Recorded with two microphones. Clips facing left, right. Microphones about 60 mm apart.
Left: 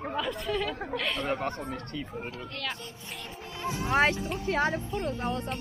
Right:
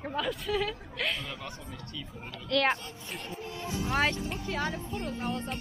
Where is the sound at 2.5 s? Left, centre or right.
Right.